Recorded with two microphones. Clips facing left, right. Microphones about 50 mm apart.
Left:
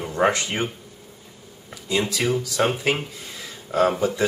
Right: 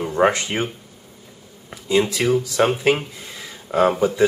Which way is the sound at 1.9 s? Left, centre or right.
Centre.